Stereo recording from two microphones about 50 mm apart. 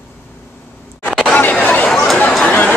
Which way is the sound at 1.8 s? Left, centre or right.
Centre.